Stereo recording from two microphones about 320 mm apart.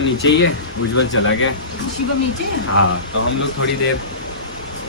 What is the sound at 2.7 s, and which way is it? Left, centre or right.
A man's voice, left.